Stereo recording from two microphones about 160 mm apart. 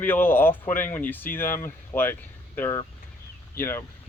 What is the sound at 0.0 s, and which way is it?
Speech, 10° left (ahead or behind).